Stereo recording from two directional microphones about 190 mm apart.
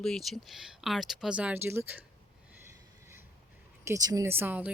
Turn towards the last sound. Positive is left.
turn(degrees=-10)  # may be behind; listen again after turning